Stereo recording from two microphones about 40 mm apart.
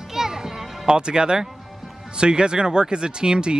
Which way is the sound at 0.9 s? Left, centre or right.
Right.